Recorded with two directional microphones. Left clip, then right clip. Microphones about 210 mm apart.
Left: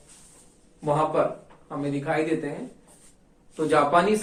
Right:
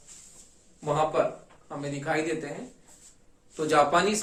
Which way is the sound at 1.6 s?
45° right (ahead or behind).